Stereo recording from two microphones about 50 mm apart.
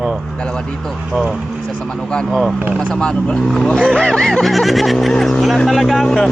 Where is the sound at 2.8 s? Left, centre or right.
Centre.